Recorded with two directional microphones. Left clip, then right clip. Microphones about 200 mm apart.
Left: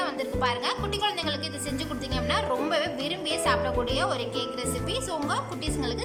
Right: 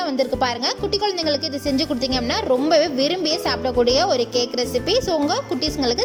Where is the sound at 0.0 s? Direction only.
30° right (ahead or behind).